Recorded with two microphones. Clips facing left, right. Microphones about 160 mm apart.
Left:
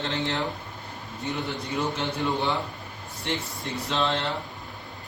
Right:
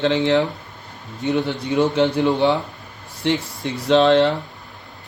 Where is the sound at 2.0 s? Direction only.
85° right.